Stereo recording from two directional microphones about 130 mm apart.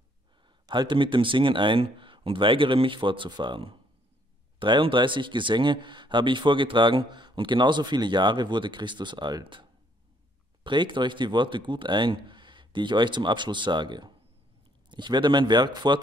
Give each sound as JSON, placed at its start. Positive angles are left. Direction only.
{"t": 0.7, "sound": "speech", "side_deg": -35}